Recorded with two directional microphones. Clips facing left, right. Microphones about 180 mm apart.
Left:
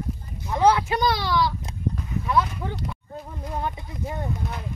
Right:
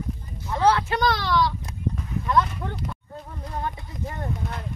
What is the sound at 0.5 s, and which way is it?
Speech, 15° left (ahead or behind).